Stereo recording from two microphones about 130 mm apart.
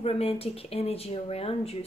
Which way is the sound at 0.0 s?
50° left (ahead or behind).